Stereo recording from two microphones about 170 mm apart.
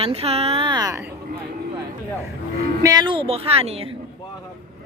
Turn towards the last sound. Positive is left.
turn(degrees=-35)  # may be behind; listen again after turning